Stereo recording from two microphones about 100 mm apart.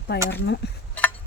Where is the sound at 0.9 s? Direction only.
15° left (ahead or behind).